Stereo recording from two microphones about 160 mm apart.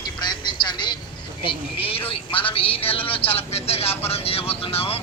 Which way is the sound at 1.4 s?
35° left (ahead or behind).